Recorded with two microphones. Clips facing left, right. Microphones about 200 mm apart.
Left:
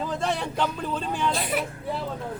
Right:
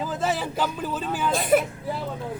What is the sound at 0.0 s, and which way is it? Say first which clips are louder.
Speech: right 1 dB; 5° right (ahead or behind).